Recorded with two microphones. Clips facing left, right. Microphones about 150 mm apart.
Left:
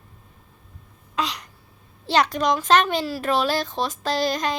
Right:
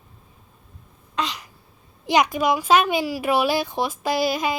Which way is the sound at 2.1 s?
10° right (ahead or behind).